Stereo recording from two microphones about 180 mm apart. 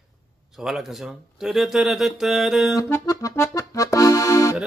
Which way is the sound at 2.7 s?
15° left (ahead or behind).